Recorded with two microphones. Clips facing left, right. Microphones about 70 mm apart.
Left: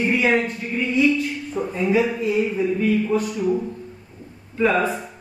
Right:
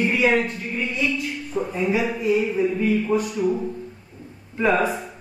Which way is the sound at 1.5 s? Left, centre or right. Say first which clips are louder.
Left 2 dB; centre.